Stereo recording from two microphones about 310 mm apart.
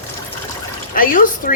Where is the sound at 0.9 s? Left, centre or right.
Left.